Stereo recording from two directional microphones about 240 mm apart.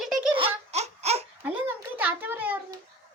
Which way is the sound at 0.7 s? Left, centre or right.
Right.